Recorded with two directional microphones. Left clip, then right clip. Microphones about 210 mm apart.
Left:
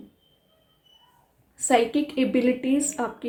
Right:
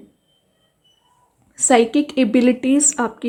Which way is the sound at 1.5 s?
45° right (ahead or behind).